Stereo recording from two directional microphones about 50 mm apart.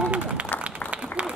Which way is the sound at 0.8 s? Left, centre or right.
Left.